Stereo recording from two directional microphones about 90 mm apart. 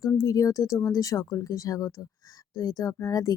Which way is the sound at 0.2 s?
40° left (ahead or behind).